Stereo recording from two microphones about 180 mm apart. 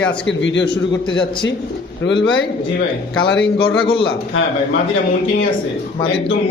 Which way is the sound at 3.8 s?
30° left (ahead or behind).